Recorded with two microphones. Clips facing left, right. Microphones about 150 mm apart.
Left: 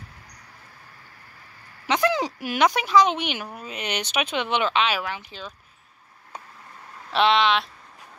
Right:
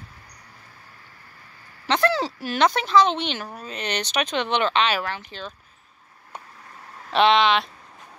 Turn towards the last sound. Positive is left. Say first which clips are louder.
# right 2 dB
turn(degrees=0)  # may be behind; listen again after turning